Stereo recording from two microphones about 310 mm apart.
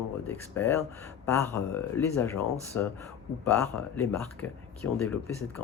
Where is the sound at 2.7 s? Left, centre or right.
Left.